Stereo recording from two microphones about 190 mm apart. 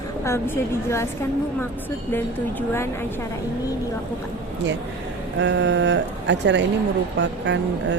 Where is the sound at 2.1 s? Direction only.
10° left (ahead or behind).